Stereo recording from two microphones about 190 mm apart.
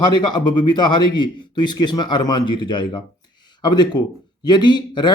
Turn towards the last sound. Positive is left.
turn(degrees=25)  # may be behind; listen again after turning